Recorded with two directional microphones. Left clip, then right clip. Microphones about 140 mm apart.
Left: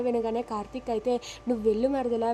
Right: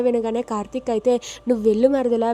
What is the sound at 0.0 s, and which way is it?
A woman's voice, 45° right (ahead or behind).